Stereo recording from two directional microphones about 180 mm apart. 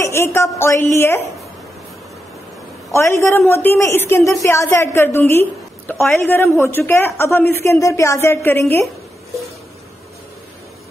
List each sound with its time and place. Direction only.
0.0 s a woman's voice: 15° left (ahead or behind)
2.9 s a woman's voice: 15° left (ahead or behind)